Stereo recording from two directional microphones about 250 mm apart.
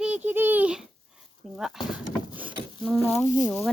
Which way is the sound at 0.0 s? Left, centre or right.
Centre.